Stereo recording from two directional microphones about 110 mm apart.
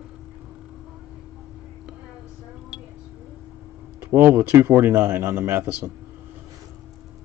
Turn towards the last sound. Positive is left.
turn(degrees=-20)  # may be behind; listen again after turning